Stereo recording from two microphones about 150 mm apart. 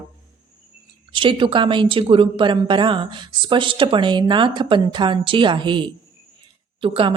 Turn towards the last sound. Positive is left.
turn(degrees=-35)  # may be behind; listen again after turning